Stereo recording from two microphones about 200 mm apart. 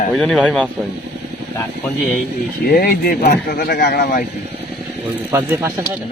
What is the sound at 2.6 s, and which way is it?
Speech, 50° left (ahead or behind).